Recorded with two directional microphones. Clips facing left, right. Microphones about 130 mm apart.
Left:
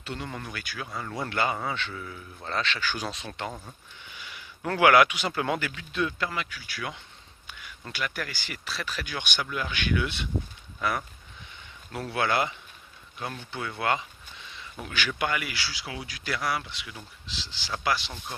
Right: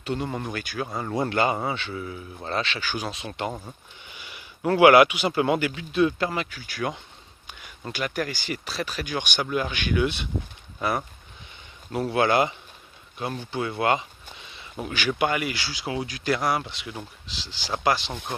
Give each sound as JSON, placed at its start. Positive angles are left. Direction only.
{"t": 0.0, "sound": "speech", "side_deg": -20}
{"t": 0.8, "sound": "speech", "side_deg": -40}
{"t": 1.1, "sound": "speech", "side_deg": -20}
{"t": 4.2, "sound": "a sound", "side_deg": -15}
{"t": 5.3, "sound": "speech", "side_deg": -15}
{"t": 6.1, "sound": "speech", "side_deg": -30}
{"t": 6.5, "sound": "speech", "side_deg": -45}
{"t": 7.4, "sound": "a sound", "side_deg": -20}
{"t": 8.3, "sound": "speech", "side_deg": -15}
{"t": 17.4, "sound": "speech", "side_deg": -15}
{"t": 18.1, "sound": "speech", "side_deg": -65}